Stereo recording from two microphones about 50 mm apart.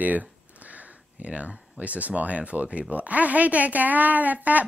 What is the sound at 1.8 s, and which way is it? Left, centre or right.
A woman's voice, right.